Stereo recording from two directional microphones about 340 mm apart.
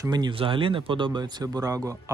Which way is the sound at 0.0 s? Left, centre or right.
Centre.